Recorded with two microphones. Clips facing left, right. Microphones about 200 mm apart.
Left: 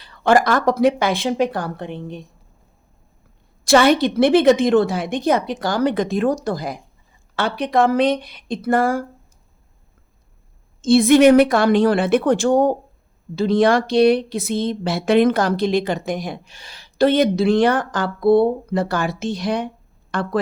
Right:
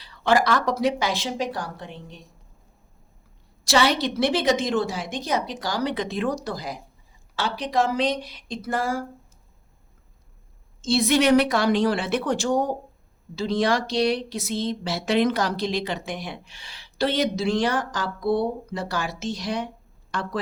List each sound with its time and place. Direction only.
0.0 s speech: 50° left (ahead or behind)
3.6 s a woman's voice: 55° left (ahead or behind)
10.8 s a woman's voice: 55° left (ahead or behind)